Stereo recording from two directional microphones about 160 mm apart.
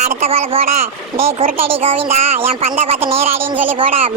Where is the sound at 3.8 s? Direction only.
35° right (ahead or behind).